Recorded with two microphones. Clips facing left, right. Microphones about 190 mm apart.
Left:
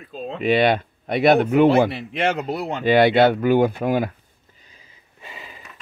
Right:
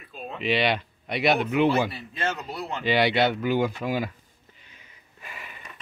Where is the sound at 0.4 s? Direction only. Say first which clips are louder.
Left 7 dB; 50° left (ahead or behind).